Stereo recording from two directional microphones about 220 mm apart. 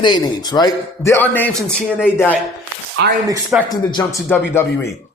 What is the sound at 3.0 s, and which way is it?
Speech, 50° right (ahead or behind).